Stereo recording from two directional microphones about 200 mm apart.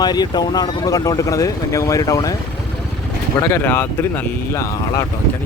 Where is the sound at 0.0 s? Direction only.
20° left (ahead or behind).